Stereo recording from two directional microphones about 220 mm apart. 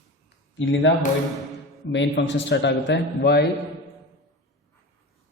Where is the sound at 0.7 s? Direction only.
55° left (ahead or behind).